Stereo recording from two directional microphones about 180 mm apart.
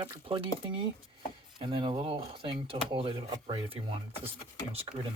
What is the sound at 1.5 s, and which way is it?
Speech, 25° right (ahead or behind).